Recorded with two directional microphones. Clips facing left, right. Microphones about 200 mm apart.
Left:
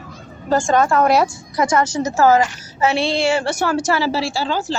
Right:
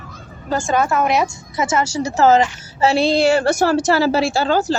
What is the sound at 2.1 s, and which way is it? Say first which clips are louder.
A woman's voice: right 1 dB; 20° right (ahead or behind).